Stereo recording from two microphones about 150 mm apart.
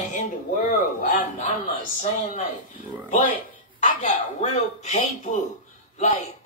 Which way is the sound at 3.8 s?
55° left (ahead or behind).